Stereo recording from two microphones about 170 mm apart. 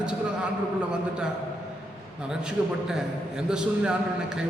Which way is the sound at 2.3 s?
5° right (ahead or behind).